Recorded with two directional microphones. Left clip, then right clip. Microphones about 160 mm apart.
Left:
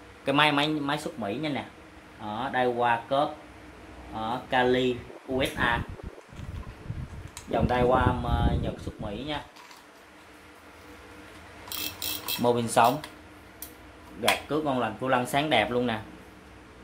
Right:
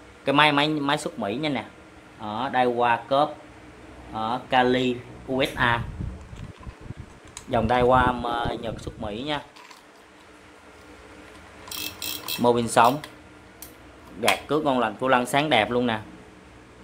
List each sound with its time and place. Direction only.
0.2 s speech: 25° right (ahead or behind); by 5.8 s 40° right (ahead or behind)
7.5 s speech: 45° right (ahead or behind)
12.4 s speech: 30° right (ahead or behind)
14.2 s speech: 40° right (ahead or behind)
15.4 s speech: 25° right (ahead or behind)